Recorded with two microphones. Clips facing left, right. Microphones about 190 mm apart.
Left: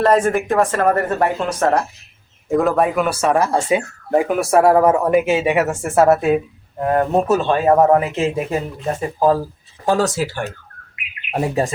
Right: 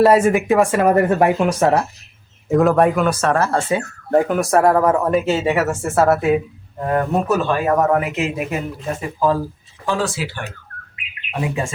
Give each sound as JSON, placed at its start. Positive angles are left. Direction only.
{"t": 0.0, "sound": "speech", "side_deg": -5}
{"t": 2.5, "sound": "speech", "side_deg": 0}